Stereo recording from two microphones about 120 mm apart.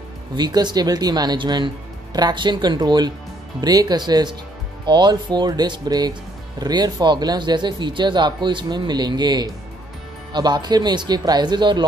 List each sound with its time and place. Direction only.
0.4 s speech: 35° right (ahead or behind)